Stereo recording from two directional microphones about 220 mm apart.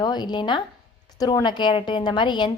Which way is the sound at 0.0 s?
20° left (ahead or behind).